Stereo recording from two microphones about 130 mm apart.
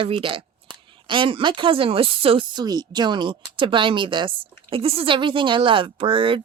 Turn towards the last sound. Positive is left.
turn(degrees=-40)  # may be behind; listen again after turning